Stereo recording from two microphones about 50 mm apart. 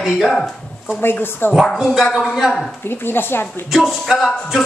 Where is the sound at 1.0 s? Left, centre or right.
Left.